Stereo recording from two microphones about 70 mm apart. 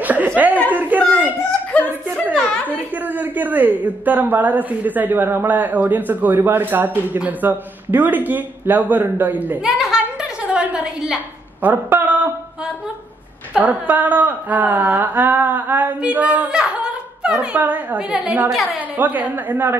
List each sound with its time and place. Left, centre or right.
0.0 s chuckle: right
0.7 s a sound: right
1.7 s chuckle: centre
2.3 s a sound: left
3.1 s a man's voice: right
9.6 s a woman's voice: centre
10.4 s a sound: centre
11.6 s a man's voice: right
13.6 s a man's voice: right
16.0 s a sound: right
17.6 s a man's voice: right
18.1 s a woman's voice: centre
18.5 s a woman's voice: centre
18.9 s a man's voice: right